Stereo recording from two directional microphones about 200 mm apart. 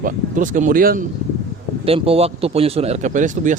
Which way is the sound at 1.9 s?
30° right (ahead or behind).